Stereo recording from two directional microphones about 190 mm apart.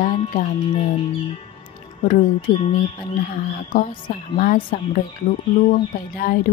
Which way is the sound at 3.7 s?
45° left (ahead or behind).